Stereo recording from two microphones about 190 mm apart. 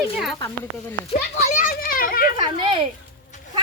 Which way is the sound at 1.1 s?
40° left (ahead or behind).